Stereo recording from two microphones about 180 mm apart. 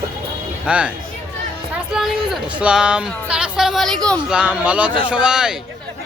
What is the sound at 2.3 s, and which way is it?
Speech, 5° right (ahead or behind).